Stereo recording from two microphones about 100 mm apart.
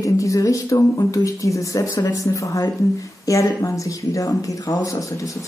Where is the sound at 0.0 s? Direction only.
30° left (ahead or behind).